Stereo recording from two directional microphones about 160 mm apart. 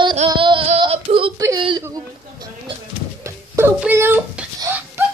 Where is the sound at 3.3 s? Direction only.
15° right (ahead or behind).